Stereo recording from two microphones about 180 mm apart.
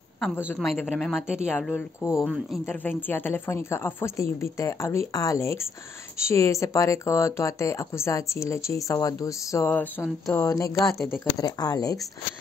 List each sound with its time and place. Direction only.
0.5 s speech: centre (ahead or behind)
1.5 s speech: 5° left (ahead or behind)
2.2 s speech: centre (ahead or behind)
2.6 s speech: 10° left (ahead or behind)
10.9 s speech: centre (ahead or behind)
11.3 s speech: 20° left (ahead or behind)